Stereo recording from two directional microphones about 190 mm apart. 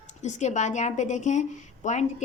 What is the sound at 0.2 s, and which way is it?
A woman's voice, 40° left (ahead or behind).